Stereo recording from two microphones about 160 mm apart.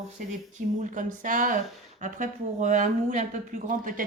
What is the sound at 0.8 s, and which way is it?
Speech, 55° right (ahead or behind).